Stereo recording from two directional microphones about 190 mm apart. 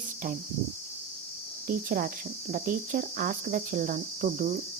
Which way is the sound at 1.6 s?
45° right (ahead or behind).